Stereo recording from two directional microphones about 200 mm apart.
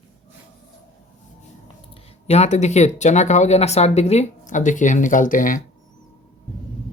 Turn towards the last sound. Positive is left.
turn(degrees=40)  # may be behind; listen again after turning